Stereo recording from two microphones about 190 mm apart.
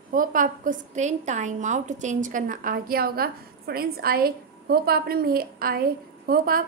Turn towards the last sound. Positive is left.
turn(degrees=-50)  # may be behind; listen again after turning